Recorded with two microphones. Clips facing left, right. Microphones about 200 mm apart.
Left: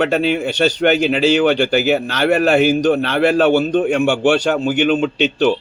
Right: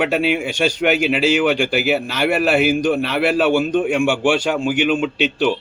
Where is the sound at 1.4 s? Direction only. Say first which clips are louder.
Left 3 dB; 40° left (ahead or behind).